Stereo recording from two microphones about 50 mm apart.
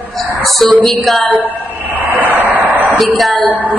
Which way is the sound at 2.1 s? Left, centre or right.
Right.